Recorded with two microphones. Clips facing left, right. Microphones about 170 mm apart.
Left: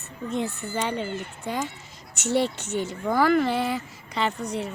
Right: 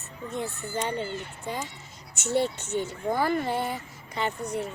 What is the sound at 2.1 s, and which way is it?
Speech, 80° left.